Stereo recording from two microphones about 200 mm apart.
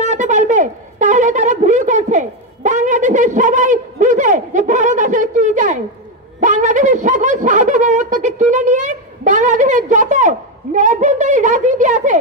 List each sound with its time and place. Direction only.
0.0 s a woman's voice: 40° right (ahead or behind)